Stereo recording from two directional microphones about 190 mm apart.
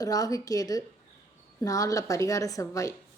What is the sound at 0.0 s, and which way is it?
A woman's voice, 20° left (ahead or behind).